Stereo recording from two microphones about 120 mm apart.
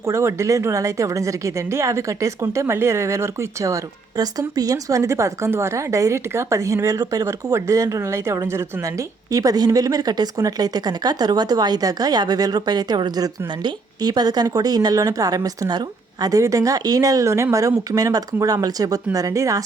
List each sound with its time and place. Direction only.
0.0 s speech: 20° right (ahead or behind)